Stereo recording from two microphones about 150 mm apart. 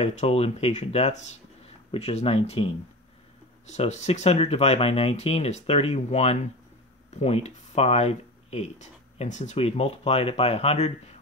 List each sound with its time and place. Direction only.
0.0 s speech: 45° left (ahead or behind)